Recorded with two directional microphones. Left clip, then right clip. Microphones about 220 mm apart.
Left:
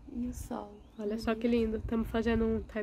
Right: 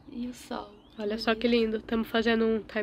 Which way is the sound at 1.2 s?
Centre (ahead or behind).